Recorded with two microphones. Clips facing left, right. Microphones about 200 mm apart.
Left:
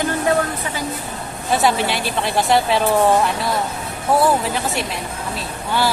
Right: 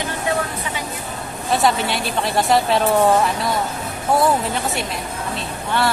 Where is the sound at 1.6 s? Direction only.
Centre (ahead or behind).